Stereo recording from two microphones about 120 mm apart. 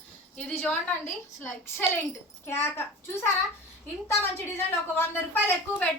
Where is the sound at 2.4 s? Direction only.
20° left (ahead or behind).